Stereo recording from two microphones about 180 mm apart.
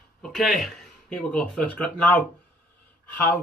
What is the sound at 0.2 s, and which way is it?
Speech, centre (ahead or behind).